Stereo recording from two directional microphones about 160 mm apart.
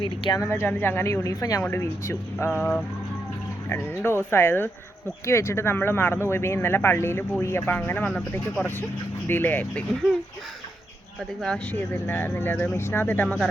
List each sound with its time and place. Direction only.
0.0 s speech: 25° left (ahead or behind)
11.4 s speech: 5° left (ahead or behind)
13.2 s speech: centre (ahead or behind)